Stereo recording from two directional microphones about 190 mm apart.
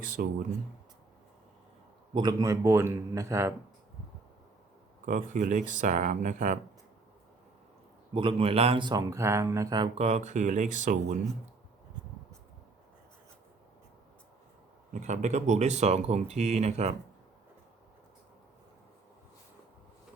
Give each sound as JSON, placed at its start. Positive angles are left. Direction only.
{"t": 0.2, "sound": "speech", "side_deg": -50}
{"t": 2.1, "sound": "a man's voice", "side_deg": -20}
{"t": 5.0, "sound": "speech", "side_deg": -45}
{"t": 8.1, "sound": "speech", "side_deg": -30}
{"t": 14.9, "sound": "speech", "side_deg": -40}